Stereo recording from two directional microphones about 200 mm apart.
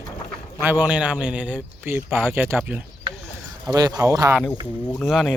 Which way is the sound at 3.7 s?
20° right (ahead or behind).